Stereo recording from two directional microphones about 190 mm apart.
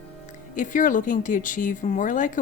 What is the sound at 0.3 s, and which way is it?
Speech, 40° left (ahead or behind).